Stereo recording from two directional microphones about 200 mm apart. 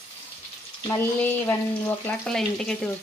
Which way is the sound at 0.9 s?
15° left (ahead or behind).